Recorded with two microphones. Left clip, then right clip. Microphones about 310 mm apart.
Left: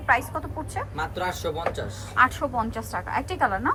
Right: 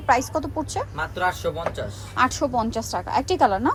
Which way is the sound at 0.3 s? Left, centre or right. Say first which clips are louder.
Right 5 dB; centre.